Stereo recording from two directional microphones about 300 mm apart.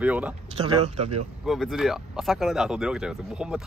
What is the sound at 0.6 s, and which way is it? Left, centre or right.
Speech, right.